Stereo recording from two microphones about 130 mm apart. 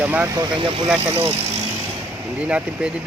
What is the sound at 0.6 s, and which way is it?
Speech, 40° right (ahead or behind).